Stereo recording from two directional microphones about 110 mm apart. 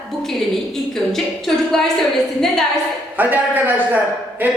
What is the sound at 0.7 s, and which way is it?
Speech, 5° left (ahead or behind).